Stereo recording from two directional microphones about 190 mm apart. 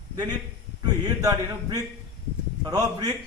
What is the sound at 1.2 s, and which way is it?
Speech, 20° right (ahead or behind).